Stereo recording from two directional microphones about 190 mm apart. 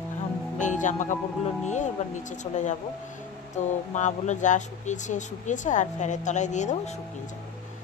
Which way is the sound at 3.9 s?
40° left (ahead or behind).